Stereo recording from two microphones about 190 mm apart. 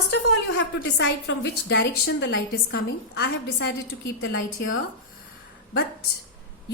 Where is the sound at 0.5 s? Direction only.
65° left (ahead or behind).